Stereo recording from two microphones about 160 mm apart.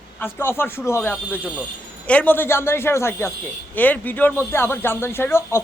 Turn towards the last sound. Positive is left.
turn(degrees=15)  # may be behind; listen again after turning